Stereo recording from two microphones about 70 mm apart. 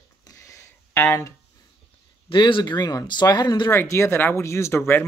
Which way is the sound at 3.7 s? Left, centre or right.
Left.